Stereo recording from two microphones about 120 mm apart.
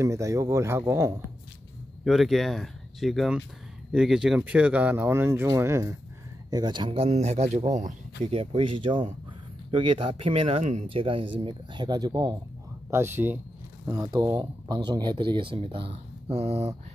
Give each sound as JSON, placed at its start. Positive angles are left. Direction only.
{"t": 0.0, "sound": "speech", "side_deg": -25}
{"t": 2.0, "sound": "speech", "side_deg": 0}
{"t": 6.5, "sound": "speech", "side_deg": -40}
{"t": 8.3, "sound": "speech", "side_deg": -55}
{"t": 12.9, "sound": "speech", "side_deg": -20}
{"t": 13.8, "sound": "speech", "side_deg": -30}